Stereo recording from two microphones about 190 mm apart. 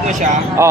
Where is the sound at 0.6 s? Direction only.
15° right (ahead or behind).